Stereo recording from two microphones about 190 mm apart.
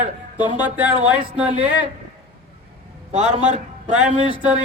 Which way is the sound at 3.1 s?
35° right (ahead or behind).